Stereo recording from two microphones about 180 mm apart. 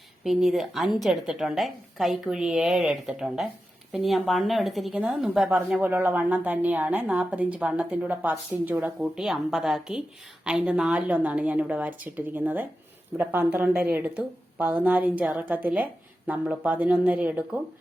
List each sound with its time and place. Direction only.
0.3 s a woman's voice: centre (ahead or behind)